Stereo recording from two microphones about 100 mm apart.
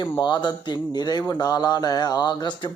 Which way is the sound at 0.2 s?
50° left (ahead or behind).